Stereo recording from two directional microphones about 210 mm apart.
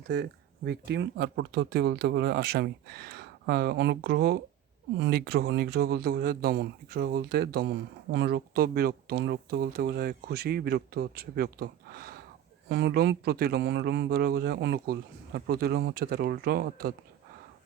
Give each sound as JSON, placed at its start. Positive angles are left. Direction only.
{"t": 0.1, "sound": "speech", "side_deg": -50}